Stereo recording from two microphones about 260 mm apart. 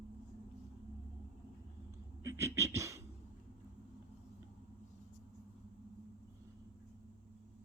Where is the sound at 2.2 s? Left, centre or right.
Centre.